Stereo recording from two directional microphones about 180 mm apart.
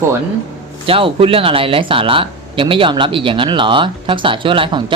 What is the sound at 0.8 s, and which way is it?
Speech, 30° right (ahead or behind).